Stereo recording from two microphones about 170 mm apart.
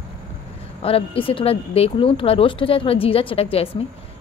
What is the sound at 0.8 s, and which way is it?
Speech, 35° left (ahead or behind).